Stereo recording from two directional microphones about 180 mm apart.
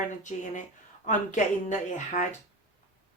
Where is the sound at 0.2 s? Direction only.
45° left (ahead or behind).